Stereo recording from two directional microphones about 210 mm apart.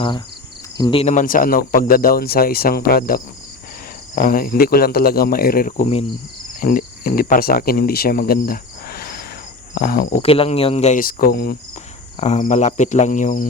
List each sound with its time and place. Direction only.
0.8 s cricket: 25° left (ahead or behind)
1.1 s speech: 40° left (ahead or behind)
6.6 s cricket: 40° left (ahead or behind)
9.7 s speech: 45° left (ahead or behind)
10.2 s speech: 25° left (ahead or behind); by 11.5 s 45° left (ahead or behind)
12.1 s speech: 30° left (ahead or behind)